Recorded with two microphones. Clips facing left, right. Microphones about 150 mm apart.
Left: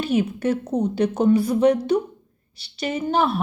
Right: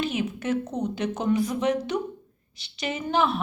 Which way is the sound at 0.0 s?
35° left (ahead or behind).